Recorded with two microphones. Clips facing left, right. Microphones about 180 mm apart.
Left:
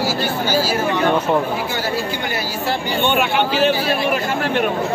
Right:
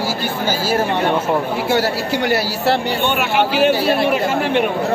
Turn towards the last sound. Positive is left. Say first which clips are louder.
# right 2 dB
turn(degrees=-5)  # may be behind; listen again after turning